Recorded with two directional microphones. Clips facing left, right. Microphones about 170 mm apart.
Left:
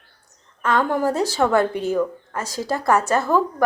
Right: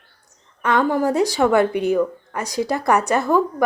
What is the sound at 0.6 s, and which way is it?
A woman's voice, 15° right (ahead or behind).